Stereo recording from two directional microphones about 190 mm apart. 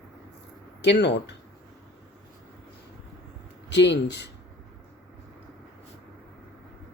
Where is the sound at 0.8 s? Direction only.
65° left (ahead or behind).